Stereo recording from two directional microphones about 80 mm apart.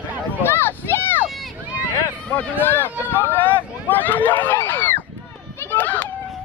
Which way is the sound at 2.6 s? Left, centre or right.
Left.